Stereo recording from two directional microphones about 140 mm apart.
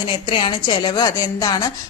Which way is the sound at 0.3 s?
35° left (ahead or behind).